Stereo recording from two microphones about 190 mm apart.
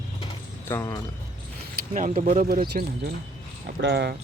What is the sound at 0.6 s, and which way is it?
Speech, 15° left (ahead or behind).